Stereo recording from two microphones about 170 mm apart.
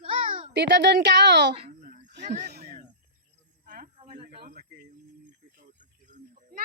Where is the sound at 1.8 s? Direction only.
45° right (ahead or behind).